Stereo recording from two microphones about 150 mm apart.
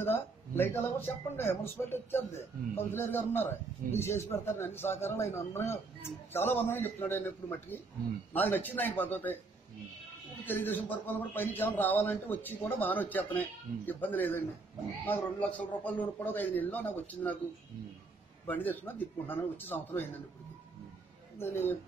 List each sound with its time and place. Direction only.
0.0 s speech: 15° left (ahead or behind)
10.4 s speech: 15° left (ahead or behind)
18.5 s speech: 10° left (ahead or behind)
21.4 s speech: 15° left (ahead or behind)